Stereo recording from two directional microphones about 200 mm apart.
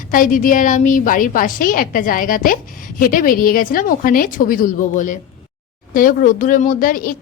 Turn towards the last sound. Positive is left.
turn(degrees=45)  # may be behind; listen again after turning